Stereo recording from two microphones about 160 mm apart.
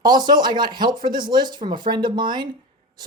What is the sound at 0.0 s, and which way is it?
Speech, 25° right (ahead or behind).